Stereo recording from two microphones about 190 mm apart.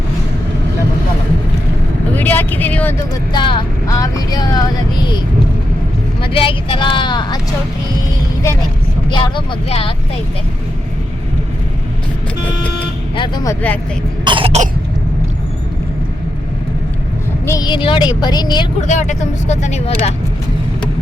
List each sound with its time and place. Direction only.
2.1 s vehicle: 10° left (ahead or behind)
3.3 s speech: 25° left (ahead or behind)
6.2 s speech: 30° left (ahead or behind)
9.0 s speech: 25° left (ahead or behind)
13.1 s speech: 25° left (ahead or behind)
14.3 s cough: 30° right (ahead or behind)
17.4 s speech: 20° left (ahead or behind)
18.8 s speech: 40° left (ahead or behind)